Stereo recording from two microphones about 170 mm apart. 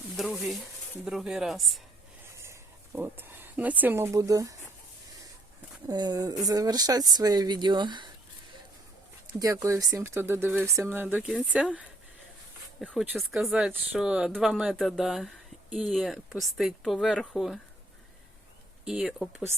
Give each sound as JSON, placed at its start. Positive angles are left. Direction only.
{"t": 0.2, "sound": "speech", "side_deg": 0}
{"t": 2.4, "sound": "speech", "side_deg": -15}
{"t": 5.9, "sound": "speech", "side_deg": -25}
{"t": 9.4, "sound": "speech", "side_deg": -20}
{"t": 12.8, "sound": "speech", "side_deg": 5}
{"t": 18.9, "sound": "speech", "side_deg": -5}